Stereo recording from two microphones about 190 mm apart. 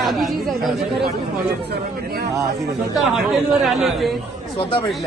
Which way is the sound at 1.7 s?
55° right (ahead or behind).